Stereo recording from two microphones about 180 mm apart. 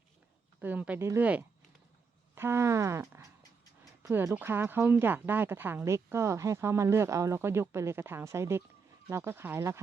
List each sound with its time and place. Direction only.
0.6 s speech: 10° right (ahead or behind)